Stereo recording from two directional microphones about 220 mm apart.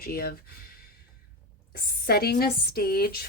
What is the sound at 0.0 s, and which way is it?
Speech, 45° left (ahead or behind).